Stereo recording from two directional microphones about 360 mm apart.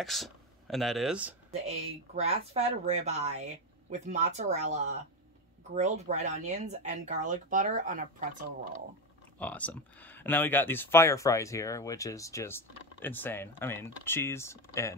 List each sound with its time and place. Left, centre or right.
0.0 s speech: centre
1.7 s speech: centre
9.4 s speech: centre